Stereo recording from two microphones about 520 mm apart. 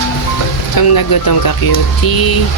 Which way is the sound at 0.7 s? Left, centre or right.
Left.